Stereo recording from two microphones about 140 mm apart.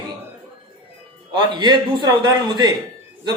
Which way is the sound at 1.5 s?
35° right (ahead or behind).